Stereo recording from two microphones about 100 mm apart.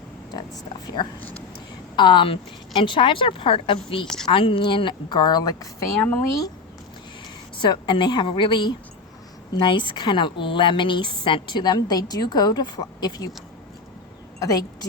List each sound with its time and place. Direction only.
0.3 s a woman's voice: 45° left (ahead or behind); by 4.0 s 60° left (ahead or behind)
4.0 s speech: 5° left (ahead or behind)
4.3 s a woman's voice: 60° left (ahead or behind); by 6.5 s 30° left (ahead or behind)
7.6 s a woman's voice: 50° left (ahead or behind)
14.3 s speech: 35° left (ahead or behind)